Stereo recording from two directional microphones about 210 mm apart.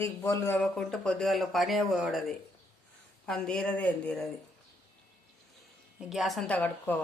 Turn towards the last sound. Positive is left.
turn(degrees=5)  # may be behind; listen again after turning